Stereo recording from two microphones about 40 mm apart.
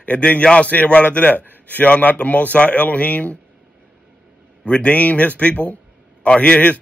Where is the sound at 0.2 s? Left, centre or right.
Left.